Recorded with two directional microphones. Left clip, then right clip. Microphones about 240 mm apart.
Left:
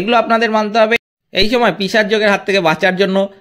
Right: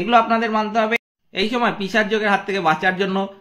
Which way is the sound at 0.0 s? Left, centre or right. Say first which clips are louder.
Left 4 dB; left.